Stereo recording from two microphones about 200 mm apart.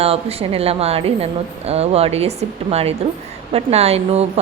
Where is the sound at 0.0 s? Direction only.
30° right (ahead or behind).